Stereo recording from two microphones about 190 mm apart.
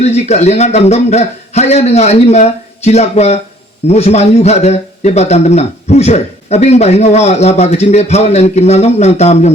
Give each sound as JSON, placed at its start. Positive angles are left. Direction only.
{"t": 0.0, "sound": "a man's voice", "side_deg": 35}